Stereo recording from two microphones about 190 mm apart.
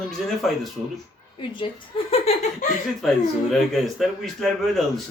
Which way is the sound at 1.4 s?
25° left (ahead or behind).